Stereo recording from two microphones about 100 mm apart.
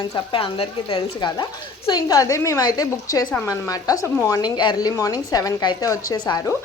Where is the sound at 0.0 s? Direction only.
50° left (ahead or behind).